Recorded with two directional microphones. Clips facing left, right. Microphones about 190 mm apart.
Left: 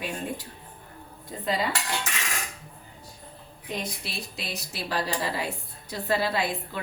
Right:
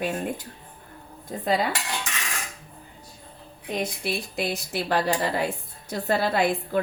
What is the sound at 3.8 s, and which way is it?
A woman's voice, 55° right (ahead or behind).